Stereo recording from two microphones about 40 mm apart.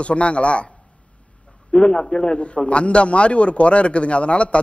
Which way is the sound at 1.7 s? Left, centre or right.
Left.